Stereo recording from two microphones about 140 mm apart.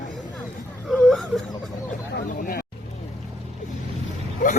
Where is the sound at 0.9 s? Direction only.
Centre (ahead or behind).